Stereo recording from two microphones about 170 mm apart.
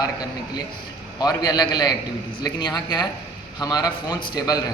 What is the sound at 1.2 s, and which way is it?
A man's voice, 25° left (ahead or behind).